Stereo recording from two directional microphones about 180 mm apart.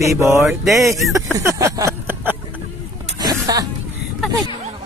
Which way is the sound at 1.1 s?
15° right (ahead or behind).